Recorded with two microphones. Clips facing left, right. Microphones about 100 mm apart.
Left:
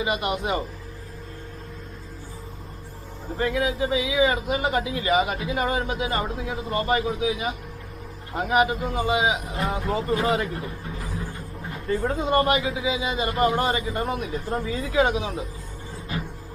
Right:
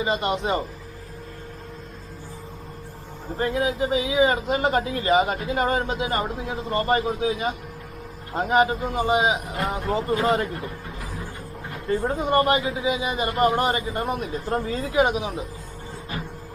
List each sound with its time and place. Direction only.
0.3 s speech: 25° right (ahead or behind)
3.3 s speech: 30° right (ahead or behind)
11.9 s speech: 25° right (ahead or behind)
14.3 s speech: 30° right (ahead or behind)
15.0 s speech: 20° right (ahead or behind)